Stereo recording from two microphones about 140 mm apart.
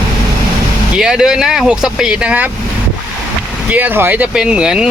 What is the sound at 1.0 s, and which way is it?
Speech, 5° right (ahead or behind).